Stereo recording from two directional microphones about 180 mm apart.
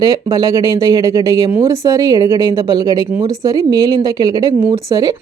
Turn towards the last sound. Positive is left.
turn(degrees=-20)  # may be behind; listen again after turning